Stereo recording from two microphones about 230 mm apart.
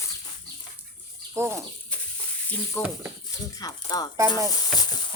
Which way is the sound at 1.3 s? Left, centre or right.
Centre.